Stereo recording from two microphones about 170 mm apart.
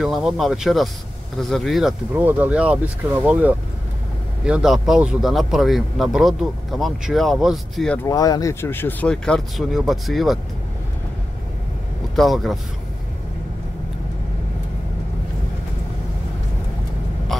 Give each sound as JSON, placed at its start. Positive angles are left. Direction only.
{"t": 0.0, "sound": "speech", "side_deg": 0}
{"t": 8.0, "sound": "speech", "side_deg": 20}
{"t": 12.2, "sound": "speech", "side_deg": 0}
{"t": 17.3, "sound": "a sound", "side_deg": 0}